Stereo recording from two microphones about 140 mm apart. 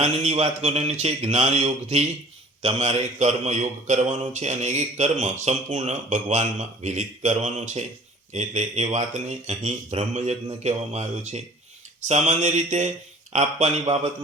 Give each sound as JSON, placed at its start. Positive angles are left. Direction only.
{"t": 0.0, "sound": "a man's voice", "side_deg": -50}